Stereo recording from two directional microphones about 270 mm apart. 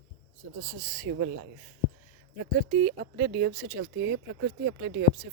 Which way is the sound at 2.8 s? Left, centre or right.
Right.